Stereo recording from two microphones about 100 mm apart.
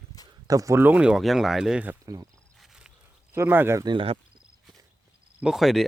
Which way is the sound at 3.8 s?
50° right (ahead or behind).